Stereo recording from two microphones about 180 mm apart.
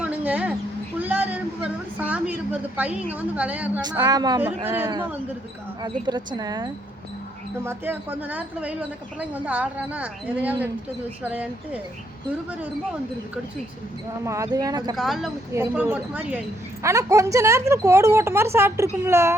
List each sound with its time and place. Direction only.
0.0 s a sound: 10° right (ahead or behind)
3.2 s speech: 10° right (ahead or behind)
3.8 s speech: 25° right (ahead or behind)
4.4 s speech: 10° right (ahead or behind)
5.8 s speech: 25° right (ahead or behind); by 11.8 s 10° right (ahead or behind)
14.3 s speech: 20° right (ahead or behind)
14.9 s speech: centre (ahead or behind)